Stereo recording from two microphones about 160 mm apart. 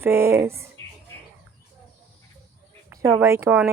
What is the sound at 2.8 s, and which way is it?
Speech, 20° right (ahead or behind).